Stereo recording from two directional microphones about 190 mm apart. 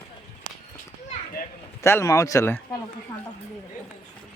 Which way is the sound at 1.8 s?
15° left (ahead or behind).